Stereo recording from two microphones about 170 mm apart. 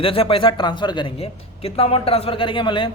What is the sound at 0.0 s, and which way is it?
A man's voice, 35° left (ahead or behind).